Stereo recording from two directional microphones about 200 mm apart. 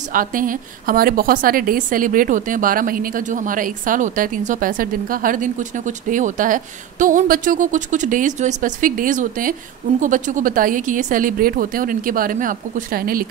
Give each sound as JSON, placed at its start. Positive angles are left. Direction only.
{"t": 0.1, "sound": "a woman's voice", "side_deg": -45}